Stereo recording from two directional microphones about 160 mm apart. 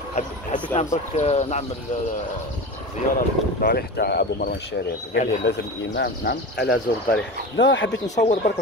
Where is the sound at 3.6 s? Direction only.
75° left (ahead or behind).